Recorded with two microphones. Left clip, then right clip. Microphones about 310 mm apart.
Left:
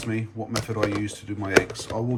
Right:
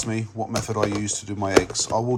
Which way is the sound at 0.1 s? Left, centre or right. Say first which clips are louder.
Even; centre.